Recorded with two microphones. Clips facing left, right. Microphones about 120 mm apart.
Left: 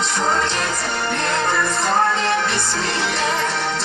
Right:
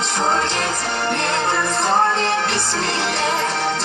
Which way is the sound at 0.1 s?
30° right (ahead or behind).